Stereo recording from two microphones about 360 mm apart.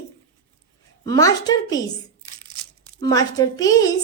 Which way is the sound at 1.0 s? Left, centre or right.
Centre.